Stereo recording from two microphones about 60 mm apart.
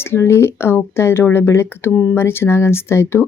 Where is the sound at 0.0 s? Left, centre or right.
Left.